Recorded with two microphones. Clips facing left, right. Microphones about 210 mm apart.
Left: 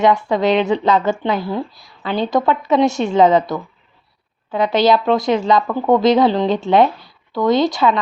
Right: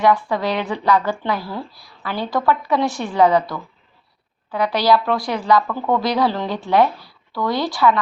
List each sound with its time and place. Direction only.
0.0 s a woman's voice: 25° left (ahead or behind)